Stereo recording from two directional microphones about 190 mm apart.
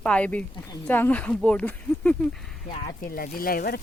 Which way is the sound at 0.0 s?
5° left (ahead or behind).